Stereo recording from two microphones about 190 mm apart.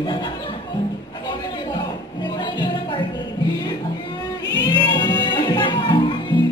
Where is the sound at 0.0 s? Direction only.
25° left (ahead or behind).